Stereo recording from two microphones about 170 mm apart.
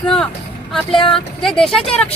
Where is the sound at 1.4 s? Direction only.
Centre (ahead or behind).